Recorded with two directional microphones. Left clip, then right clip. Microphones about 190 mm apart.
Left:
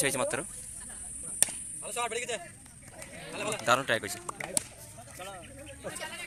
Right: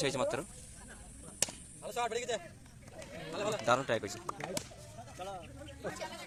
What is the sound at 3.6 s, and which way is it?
Speech, 5° right (ahead or behind).